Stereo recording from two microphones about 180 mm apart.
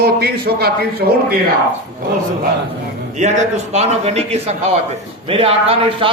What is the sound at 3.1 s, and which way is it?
A man's voice, 40° right (ahead or behind).